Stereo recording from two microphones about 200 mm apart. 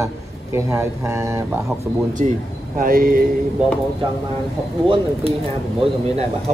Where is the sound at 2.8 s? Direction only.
45° right (ahead or behind).